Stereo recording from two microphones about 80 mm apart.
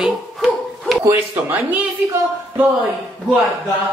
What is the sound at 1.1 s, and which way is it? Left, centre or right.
Speech, right.